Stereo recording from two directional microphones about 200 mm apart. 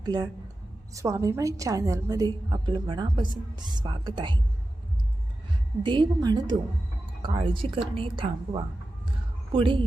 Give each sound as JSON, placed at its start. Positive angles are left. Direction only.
{"t": 0.0, "sound": "a woman's voice", "side_deg": -20}
{"t": 5.8, "sound": "a woman's voice", "side_deg": -25}